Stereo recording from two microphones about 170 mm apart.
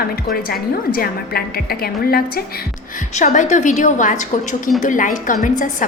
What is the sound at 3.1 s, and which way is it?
A woman's voice, 45° left (ahead or behind).